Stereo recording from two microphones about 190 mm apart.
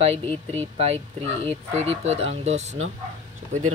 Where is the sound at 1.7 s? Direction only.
35° right (ahead or behind).